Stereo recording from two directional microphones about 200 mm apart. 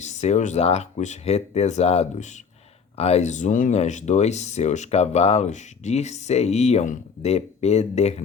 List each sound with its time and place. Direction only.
0.0 s speech: 35° left (ahead or behind)